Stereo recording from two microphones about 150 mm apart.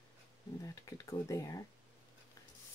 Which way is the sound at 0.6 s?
20° left (ahead or behind).